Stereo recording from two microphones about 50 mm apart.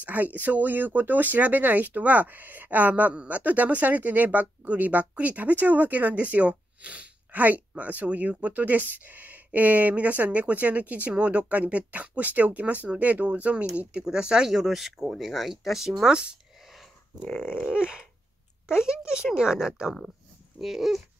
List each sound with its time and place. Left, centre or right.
0.0 s speech: right
14.0 s speech: centre
14.6 s speech: centre
16.1 s speech: centre
17.2 s a sound: left
17.6 s speech: centre